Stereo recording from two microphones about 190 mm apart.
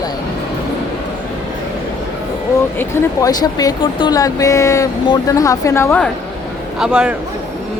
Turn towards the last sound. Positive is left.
turn(degrees=-5)  # may be behind; listen again after turning